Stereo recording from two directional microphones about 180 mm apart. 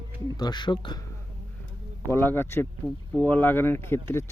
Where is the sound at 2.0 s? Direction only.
10° left (ahead or behind).